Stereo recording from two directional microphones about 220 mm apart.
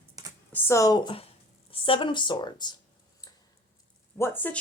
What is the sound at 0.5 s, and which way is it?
Speech, 15° left (ahead or behind).